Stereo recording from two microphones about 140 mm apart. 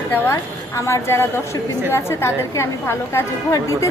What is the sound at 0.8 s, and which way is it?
A woman's voice, 20° left (ahead or behind).